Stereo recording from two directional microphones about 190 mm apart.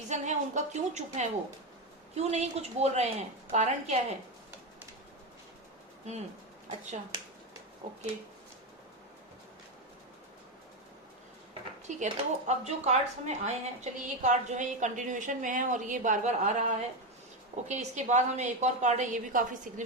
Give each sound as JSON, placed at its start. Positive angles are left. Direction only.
{"t": 0.1, "sound": "speech", "side_deg": -40}
{"t": 11.9, "sound": "speech", "side_deg": -40}